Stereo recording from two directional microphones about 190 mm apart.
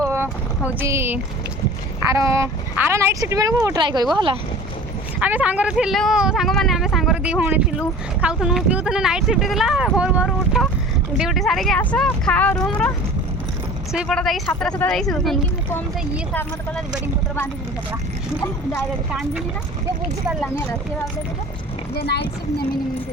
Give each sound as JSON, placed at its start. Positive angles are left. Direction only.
{"t": 0.7, "sound": "speech", "side_deg": -10}
{"t": 5.2, "sound": "speech", "side_deg": -10}
{"t": 13.9, "sound": "speech", "side_deg": 0}
{"t": 16.3, "sound": "speech", "side_deg": 10}
{"t": 21.9, "sound": "speech", "side_deg": 60}